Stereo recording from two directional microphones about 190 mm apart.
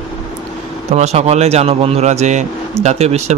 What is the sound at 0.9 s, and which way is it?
A man's voice, 35° right (ahead or behind).